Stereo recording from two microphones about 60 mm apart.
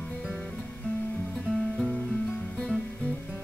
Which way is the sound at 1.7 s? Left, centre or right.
Centre.